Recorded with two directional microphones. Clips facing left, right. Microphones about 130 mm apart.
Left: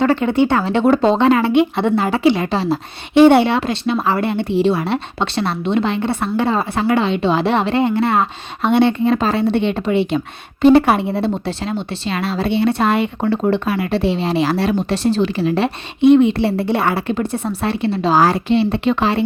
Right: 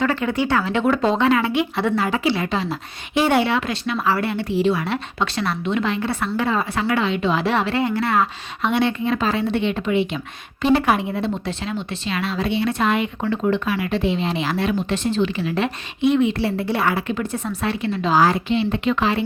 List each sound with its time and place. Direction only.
0.0 s speech: 30° left (ahead or behind)